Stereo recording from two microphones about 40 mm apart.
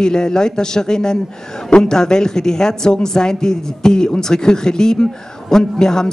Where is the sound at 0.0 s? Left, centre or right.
Centre.